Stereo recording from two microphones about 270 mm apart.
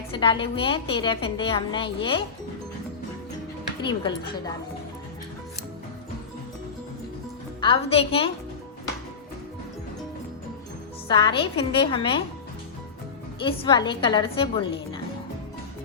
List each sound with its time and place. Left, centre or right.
0.1 s a woman's voice: centre
3.8 s a woman's voice: centre
7.6 s a woman's voice: left
11.1 s a woman's voice: centre
13.4 s a woman's voice: centre